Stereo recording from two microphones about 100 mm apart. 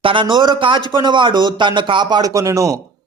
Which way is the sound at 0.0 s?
55° right (ahead or behind).